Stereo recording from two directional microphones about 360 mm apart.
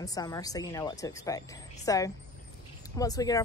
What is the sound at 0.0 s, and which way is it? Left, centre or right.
Speech, centre.